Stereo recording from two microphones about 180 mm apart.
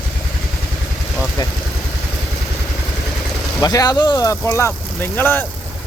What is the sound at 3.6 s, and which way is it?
Speech, 20° left (ahead or behind).